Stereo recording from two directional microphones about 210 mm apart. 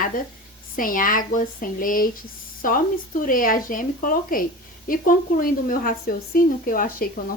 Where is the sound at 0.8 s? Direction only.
40° left (ahead or behind).